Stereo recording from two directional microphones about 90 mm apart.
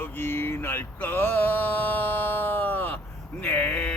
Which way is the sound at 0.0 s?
25° left (ahead or behind).